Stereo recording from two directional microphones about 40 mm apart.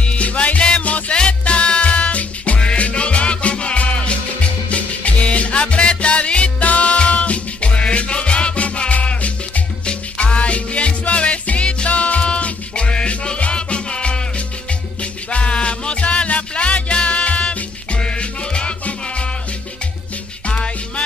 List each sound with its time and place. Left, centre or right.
0.0 s music: left
15.2 s music: left
20.4 s music: left